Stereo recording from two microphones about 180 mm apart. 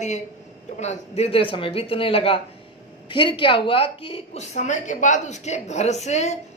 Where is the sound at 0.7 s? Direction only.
35° left (ahead or behind).